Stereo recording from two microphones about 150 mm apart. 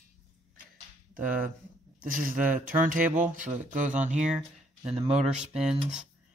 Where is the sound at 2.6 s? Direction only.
65° right (ahead or behind).